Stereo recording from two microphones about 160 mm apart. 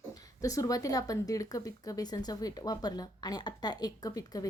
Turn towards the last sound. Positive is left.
turn(degrees=20)  # may be behind; listen again after turning